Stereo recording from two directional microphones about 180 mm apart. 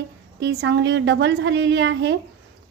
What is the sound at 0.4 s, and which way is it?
A woman's voice, 75° right (ahead or behind).